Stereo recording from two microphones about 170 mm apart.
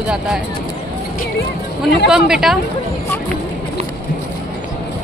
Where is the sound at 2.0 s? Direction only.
5° right (ahead or behind).